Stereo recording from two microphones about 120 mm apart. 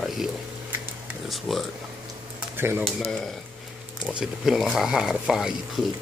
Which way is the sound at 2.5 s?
15° right (ahead or behind).